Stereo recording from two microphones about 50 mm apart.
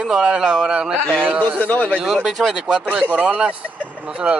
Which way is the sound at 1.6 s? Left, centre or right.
Left.